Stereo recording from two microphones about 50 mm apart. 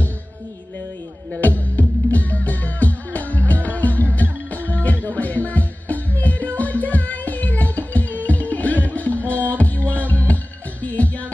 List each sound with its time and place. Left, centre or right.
1.4 s music: left